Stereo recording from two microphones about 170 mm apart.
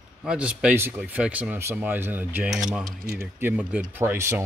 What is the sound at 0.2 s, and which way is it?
Speech, 5° right (ahead or behind).